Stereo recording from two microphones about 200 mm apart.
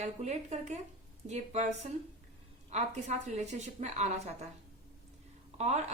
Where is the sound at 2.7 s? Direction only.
35° right (ahead or behind).